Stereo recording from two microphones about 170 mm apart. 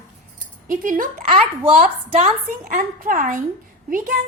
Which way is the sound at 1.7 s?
40° right (ahead or behind).